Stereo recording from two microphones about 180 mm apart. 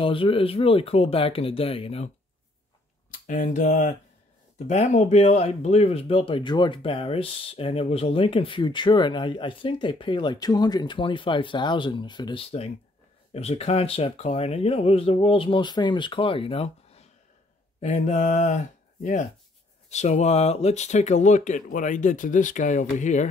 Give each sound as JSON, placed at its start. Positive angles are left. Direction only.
{"t": 0.0, "sound": "speech", "side_deg": 30}
{"t": 3.1, "sound": "speech", "side_deg": 45}
{"t": 19.9, "sound": "speech", "side_deg": 40}